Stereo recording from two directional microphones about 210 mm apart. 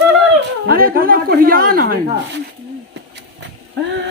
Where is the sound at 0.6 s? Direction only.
45° right (ahead or behind).